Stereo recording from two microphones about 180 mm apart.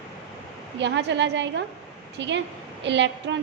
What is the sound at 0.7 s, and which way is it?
A woman's voice, 75° right (ahead or behind).